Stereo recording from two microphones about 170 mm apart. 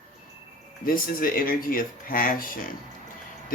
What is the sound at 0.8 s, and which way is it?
Speech, 55° left (ahead or behind).